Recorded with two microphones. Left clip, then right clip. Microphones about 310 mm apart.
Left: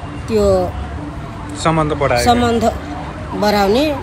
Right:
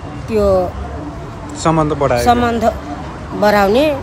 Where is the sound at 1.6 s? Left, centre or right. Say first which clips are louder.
Right 1 dB; centre.